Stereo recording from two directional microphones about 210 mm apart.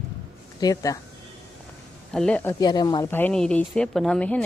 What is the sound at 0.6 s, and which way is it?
Speech, 15° left (ahead or behind).